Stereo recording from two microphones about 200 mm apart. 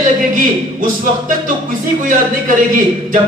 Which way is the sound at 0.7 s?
40° right (ahead or behind).